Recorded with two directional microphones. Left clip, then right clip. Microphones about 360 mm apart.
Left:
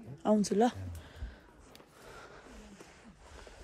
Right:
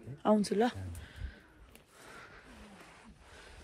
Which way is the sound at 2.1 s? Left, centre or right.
Centre.